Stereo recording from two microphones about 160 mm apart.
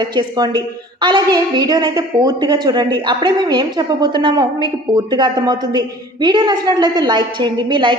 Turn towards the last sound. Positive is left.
turn(degrees=-30)  # may be behind; listen again after turning